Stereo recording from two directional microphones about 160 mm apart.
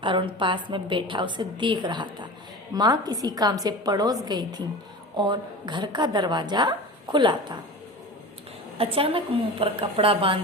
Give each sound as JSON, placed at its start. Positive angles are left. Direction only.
{"t": 0.0, "sound": "a woman's voice", "side_deg": -30}
{"t": 8.8, "sound": "a woman's voice", "side_deg": -35}